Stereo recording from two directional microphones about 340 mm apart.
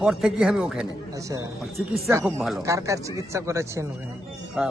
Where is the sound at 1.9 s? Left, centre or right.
Centre.